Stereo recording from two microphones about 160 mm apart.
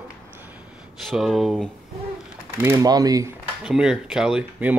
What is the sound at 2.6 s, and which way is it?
Speech, 20° right (ahead or behind).